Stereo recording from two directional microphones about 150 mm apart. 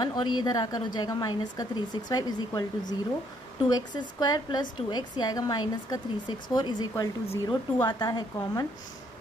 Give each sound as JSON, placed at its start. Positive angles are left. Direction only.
{"t": 0.0, "sound": "speech", "side_deg": 30}